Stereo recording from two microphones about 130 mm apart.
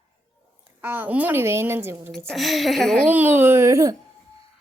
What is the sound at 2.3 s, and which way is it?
Speech, centre (ahead or behind).